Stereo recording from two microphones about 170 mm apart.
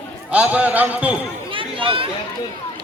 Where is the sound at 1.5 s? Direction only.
30° right (ahead or behind).